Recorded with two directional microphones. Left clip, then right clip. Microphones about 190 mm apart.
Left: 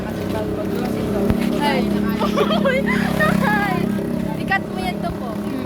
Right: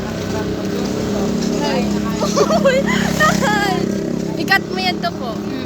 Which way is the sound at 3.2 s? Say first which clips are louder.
Right 4 dB; 55° right (ahead or behind).